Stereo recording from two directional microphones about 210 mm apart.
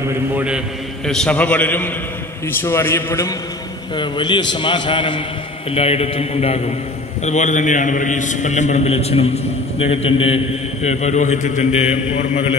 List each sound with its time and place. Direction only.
1.0 s a man's voice: 5° left (ahead or behind); by 12.4 s 30° left (ahead or behind)